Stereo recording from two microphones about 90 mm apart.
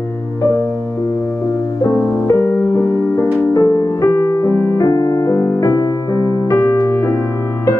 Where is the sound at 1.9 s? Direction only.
30° left (ahead or behind).